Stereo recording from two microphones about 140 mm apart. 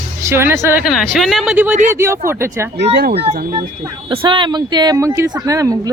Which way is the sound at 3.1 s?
45° right (ahead or behind).